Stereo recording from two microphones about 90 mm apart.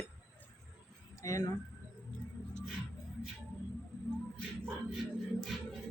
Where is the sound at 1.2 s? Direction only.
40° left (ahead or behind).